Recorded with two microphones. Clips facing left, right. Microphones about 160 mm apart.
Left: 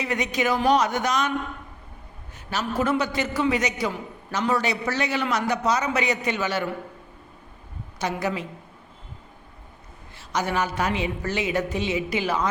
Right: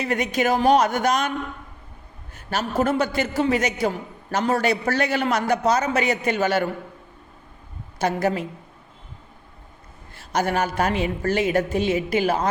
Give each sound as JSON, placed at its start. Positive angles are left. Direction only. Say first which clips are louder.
{"t": 0.0, "sound": "a man's voice", "louder": "right 3 dB", "side_deg": -50}
{"t": 2.3, "sound": "a man's voice", "louder": "right 3 dB", "side_deg": -50}
{"t": 7.9, "sound": "a man's voice", "louder": "right 5 dB", "side_deg": -50}
{"t": 10.2, "sound": "a man's voice", "louder": "right 3 dB", "side_deg": -55}